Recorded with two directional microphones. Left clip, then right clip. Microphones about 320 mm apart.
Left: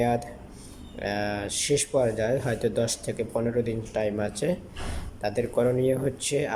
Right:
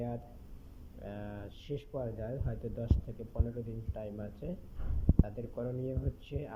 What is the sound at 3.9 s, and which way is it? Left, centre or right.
Speech, centre.